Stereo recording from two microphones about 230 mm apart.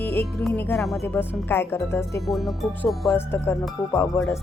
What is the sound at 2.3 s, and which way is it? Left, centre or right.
Speech, centre.